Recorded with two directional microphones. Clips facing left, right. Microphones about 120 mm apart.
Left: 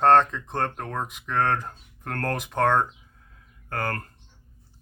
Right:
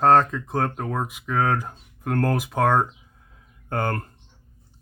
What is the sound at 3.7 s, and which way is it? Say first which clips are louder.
Speech: right 4 dB; 20° right (ahead or behind).